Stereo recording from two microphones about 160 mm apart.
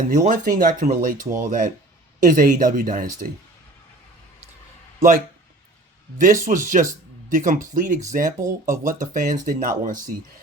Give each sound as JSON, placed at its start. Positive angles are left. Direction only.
{"t": 0.1, "sound": "speech", "side_deg": -55}
{"t": 4.9, "sound": "speech", "side_deg": -55}